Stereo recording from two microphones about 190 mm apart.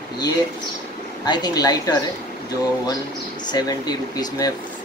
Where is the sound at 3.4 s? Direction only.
20° left (ahead or behind).